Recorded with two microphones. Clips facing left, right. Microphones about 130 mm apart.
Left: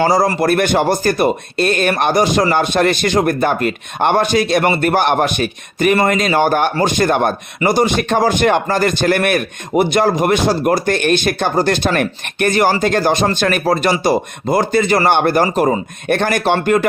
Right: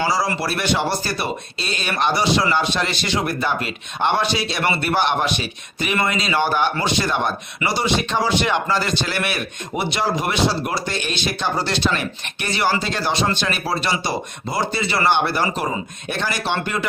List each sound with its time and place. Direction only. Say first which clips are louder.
0.0 s speech: left 8 dB; 50° left (ahead or behind)